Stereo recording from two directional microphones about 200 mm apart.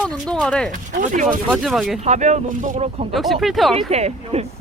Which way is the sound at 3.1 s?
Centre (ahead or behind).